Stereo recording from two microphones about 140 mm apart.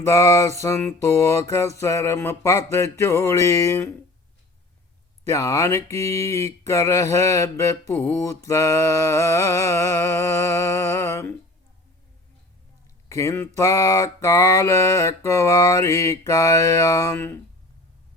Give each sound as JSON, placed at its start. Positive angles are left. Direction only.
{"t": 0.0, "sound": "mantra", "side_deg": 20}
{"t": 5.3, "sound": "mantra", "side_deg": 20}
{"t": 13.1, "sound": "mantra", "side_deg": 20}